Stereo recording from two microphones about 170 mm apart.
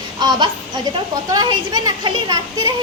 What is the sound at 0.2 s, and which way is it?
Speech, 25° right (ahead or behind).